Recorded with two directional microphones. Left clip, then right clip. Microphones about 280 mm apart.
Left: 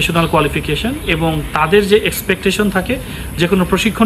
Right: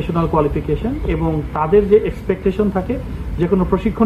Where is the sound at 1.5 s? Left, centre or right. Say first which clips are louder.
Left 1 dB; left.